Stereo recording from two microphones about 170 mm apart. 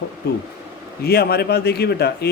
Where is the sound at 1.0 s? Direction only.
70° left (ahead or behind).